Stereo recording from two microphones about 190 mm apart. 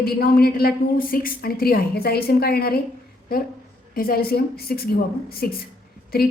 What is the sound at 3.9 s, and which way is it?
A woman's voice, 50° left (ahead or behind).